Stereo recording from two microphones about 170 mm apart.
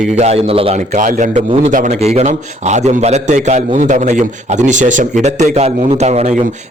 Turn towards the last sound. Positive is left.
turn(degrees=-45)  # may be behind; listen again after turning